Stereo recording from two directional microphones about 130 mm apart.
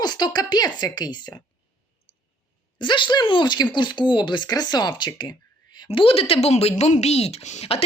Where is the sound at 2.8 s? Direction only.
40° left (ahead or behind).